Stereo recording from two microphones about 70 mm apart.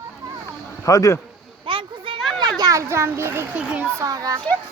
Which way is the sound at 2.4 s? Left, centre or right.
Right.